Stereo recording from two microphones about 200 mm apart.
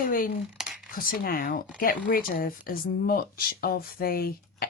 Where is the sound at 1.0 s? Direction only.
45° left (ahead or behind).